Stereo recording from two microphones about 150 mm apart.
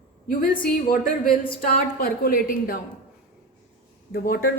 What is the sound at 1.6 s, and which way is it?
A woman's voice, 70° left (ahead or behind).